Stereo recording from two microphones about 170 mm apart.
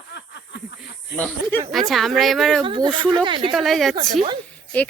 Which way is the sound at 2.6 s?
30° right (ahead or behind).